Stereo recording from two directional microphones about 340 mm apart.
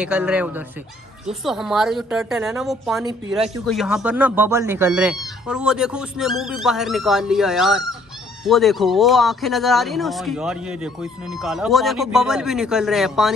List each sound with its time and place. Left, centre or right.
0.0 s speech: centre